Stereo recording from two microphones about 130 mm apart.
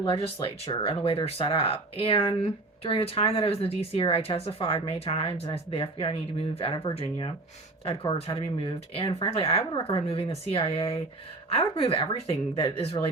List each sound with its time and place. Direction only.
0.4 s speech: 45° left (ahead or behind)